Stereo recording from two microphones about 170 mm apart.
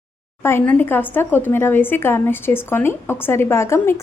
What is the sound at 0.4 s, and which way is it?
Speech, 10° left (ahead or behind).